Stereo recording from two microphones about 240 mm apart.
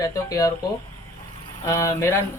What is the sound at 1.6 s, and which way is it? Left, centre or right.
Speech, centre.